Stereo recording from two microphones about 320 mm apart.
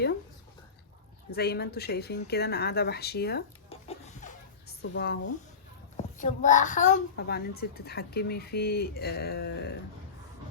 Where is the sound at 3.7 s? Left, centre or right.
Centre.